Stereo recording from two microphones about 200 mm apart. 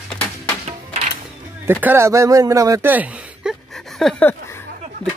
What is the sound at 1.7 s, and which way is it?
Speech, 10° right (ahead or behind).